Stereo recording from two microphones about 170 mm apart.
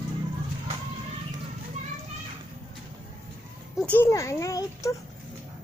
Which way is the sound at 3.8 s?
10° left (ahead or behind).